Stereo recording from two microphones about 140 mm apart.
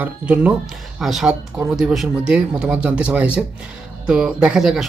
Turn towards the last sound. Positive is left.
turn(degrees=-5)  # may be behind; listen again after turning